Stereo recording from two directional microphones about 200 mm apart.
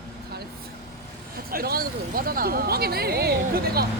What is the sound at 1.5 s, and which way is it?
Speech, 50° right (ahead or behind).